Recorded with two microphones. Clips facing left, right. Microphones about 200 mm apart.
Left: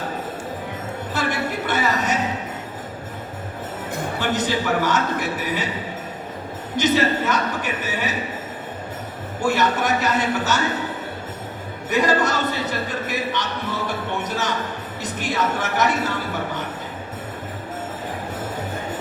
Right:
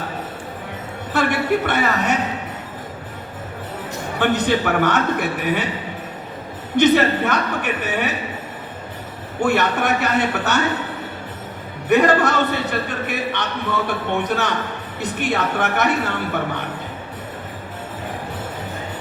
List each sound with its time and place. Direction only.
1.1 s a woman's voice: 60° right (ahead or behind)
4.2 s a man's voice: 60° right (ahead or behind)
6.7 s a man's voice: 60° right (ahead or behind)
9.4 s a man's voice: 60° right (ahead or behind)
11.9 s a man's voice: 60° right (ahead or behind)